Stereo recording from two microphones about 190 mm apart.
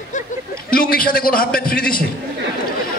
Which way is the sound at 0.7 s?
50° left (ahead or behind).